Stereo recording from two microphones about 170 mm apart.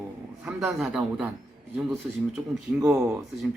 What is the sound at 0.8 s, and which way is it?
A man's voice, centre (ahead or behind).